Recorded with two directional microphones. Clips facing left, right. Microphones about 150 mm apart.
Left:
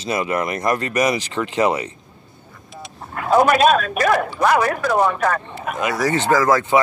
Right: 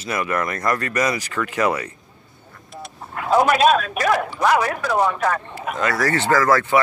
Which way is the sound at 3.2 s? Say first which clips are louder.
Left 2 dB; 50° left (ahead or behind).